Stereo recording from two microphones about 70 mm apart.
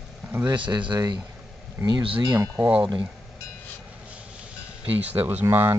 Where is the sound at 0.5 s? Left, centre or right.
Right.